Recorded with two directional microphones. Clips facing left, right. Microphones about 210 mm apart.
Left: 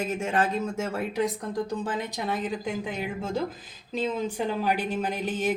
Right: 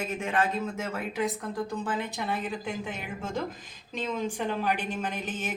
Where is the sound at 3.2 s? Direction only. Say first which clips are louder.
Left 3 dB; 10° left (ahead or behind).